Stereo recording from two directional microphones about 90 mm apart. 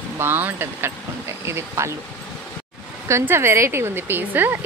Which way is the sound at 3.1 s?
30° right (ahead or behind).